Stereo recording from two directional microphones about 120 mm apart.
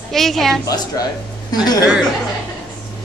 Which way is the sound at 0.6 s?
30° left (ahead or behind).